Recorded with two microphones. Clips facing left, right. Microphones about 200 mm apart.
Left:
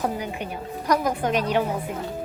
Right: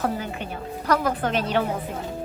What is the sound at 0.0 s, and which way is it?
A woman's voice, 15° left (ahead or behind).